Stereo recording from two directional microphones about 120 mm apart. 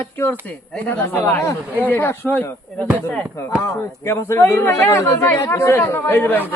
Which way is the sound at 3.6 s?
20° left (ahead or behind).